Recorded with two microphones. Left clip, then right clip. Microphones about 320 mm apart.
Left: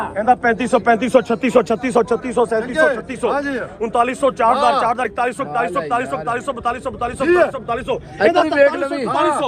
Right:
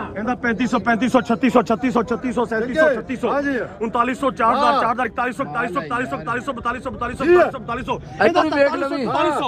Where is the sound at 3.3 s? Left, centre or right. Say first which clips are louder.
Even; left.